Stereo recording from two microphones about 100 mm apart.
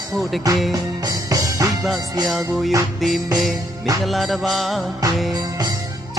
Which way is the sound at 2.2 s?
Centre (ahead or behind).